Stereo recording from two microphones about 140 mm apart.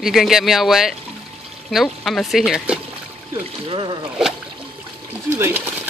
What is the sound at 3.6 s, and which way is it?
Speech, 35° right (ahead or behind).